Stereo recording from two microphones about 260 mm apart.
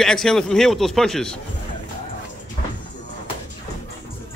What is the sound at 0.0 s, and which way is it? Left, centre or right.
A man's voice, centre.